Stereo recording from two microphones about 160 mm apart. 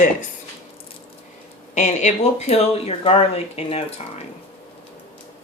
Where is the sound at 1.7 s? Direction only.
45° left (ahead or behind).